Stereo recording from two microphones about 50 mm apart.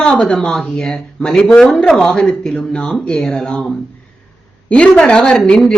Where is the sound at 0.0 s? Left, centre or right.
Centre.